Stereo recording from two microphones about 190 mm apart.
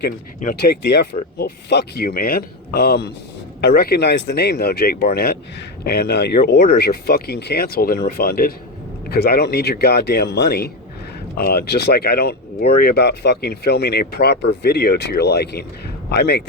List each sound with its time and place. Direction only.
0.3 s speech: 45° left (ahead or behind)
1.4 s speech: 55° left (ahead or behind)